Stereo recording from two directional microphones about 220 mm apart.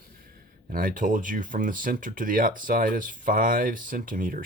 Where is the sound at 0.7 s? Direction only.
40° right (ahead or behind).